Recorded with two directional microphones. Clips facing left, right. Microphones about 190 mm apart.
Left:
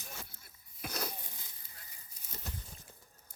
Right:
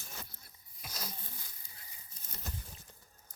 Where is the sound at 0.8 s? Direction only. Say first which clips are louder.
Left 7 dB; 60° left (ahead or behind).